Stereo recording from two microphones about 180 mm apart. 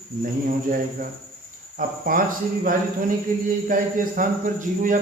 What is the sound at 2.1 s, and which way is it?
Speech, 50° right (ahead or behind).